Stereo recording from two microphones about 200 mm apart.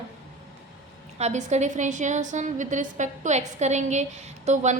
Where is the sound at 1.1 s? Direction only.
35° right (ahead or behind).